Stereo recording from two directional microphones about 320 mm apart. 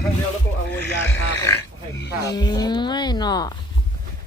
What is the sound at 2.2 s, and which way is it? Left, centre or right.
Speech, centre.